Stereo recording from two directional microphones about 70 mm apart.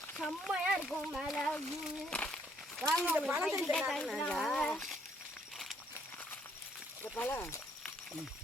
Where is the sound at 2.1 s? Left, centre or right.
Centre.